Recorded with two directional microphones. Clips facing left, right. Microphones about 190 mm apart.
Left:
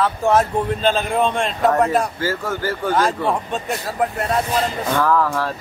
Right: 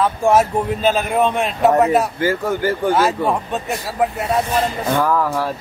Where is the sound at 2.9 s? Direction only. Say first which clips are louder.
Right 2 dB; 5° right (ahead or behind).